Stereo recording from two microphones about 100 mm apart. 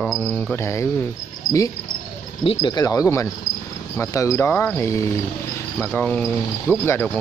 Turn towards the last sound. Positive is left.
turn(degrees=15)  # may be behind; listen again after turning